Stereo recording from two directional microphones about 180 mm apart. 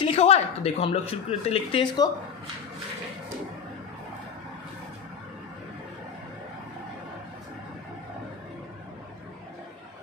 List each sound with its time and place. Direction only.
0.0 s speech: 35° left (ahead or behind)